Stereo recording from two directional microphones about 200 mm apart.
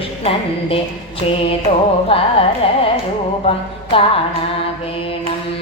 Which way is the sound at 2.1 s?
25° left (ahead or behind).